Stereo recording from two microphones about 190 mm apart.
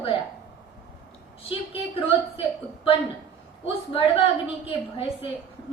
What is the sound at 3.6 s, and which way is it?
A woman's voice, 30° left (ahead or behind).